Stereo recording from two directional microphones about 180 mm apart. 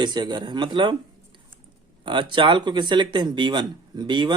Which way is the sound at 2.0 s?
25° right (ahead or behind).